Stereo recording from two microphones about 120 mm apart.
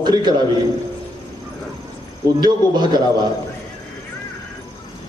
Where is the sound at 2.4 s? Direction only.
35° right (ahead or behind).